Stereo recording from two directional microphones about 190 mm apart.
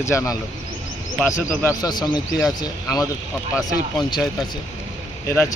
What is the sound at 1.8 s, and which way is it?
Speech, 20° left (ahead or behind).